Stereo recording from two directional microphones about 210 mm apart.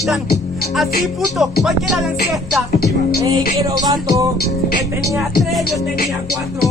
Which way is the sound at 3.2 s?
20° right (ahead or behind).